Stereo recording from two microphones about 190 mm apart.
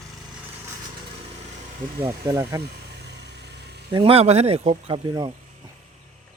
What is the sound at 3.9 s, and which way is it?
Speech, 30° right (ahead or behind).